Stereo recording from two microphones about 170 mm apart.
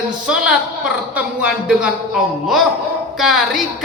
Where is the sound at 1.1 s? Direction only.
5° right (ahead or behind).